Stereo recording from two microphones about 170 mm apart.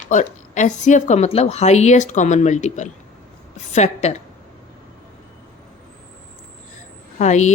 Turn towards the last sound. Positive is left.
turn(degrees=45)  # may be behind; listen again after turning